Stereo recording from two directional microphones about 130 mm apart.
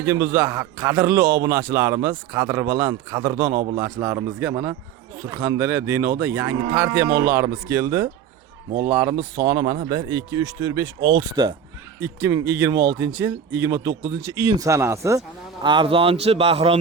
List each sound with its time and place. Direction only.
0.0 s a man's voice: 20° right (ahead or behind)
11.9 s a man's voice: 20° right (ahead or behind)
15.6 s speech: 40° right (ahead or behind)